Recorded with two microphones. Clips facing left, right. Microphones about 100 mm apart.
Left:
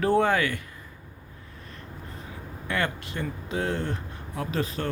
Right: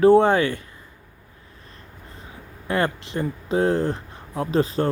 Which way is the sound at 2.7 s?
35° right (ahead or behind).